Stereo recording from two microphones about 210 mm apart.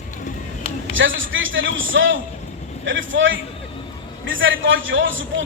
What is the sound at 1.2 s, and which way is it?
A man's voice, 65° right (ahead or behind).